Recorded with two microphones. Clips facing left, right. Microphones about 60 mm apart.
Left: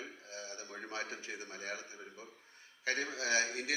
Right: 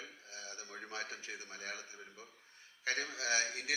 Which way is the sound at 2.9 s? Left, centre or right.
Left.